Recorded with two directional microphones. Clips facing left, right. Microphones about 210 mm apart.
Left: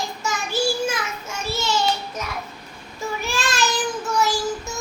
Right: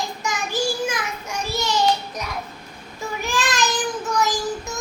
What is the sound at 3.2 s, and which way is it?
Child singing, 15° right (ahead or behind).